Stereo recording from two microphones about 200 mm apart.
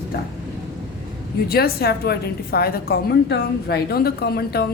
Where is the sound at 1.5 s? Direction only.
50° left (ahead or behind).